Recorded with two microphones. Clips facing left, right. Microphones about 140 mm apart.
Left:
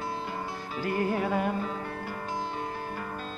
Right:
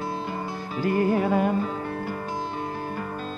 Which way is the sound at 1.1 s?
35° right (ahead or behind).